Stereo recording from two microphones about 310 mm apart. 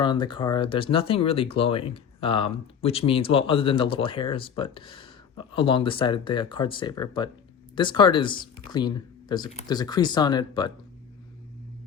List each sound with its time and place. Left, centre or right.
0.0 s speech: centre